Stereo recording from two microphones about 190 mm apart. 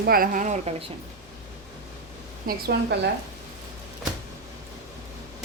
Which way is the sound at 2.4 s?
55° right (ahead or behind).